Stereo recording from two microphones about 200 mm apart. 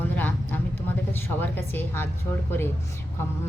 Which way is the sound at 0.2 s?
10° left (ahead or behind).